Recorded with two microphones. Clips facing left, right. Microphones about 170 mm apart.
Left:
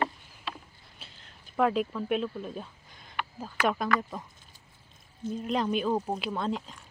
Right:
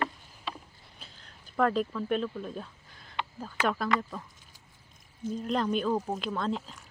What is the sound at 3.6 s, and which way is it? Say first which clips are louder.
Speech: left 1 dB; 15° left (ahead or behind).